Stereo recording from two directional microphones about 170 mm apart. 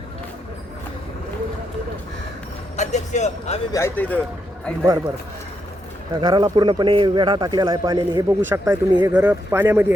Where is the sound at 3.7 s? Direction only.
15° left (ahead or behind).